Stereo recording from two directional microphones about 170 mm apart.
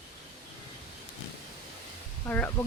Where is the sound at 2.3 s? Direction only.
10° left (ahead or behind).